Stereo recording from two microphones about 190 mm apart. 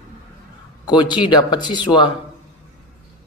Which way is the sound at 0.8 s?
25° left (ahead or behind).